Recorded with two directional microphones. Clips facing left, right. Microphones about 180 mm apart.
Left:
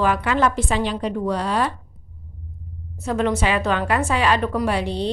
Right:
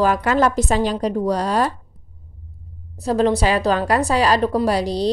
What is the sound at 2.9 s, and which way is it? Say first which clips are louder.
Speech: right 4 dB; 35° right (ahead or behind).